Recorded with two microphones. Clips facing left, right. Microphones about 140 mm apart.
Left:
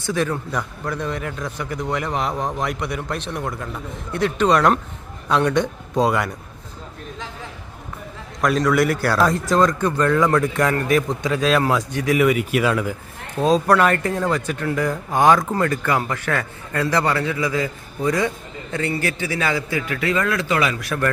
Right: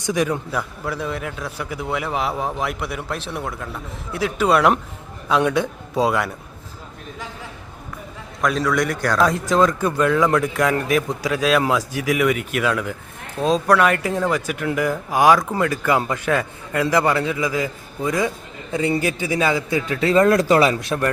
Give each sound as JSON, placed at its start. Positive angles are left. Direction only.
{"t": 0.0, "sound": "a man's voice", "side_deg": -15}
{"t": 8.4, "sound": "a man's voice", "side_deg": 0}